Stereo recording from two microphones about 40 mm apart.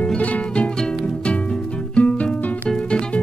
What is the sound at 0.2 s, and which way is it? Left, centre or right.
Music, left.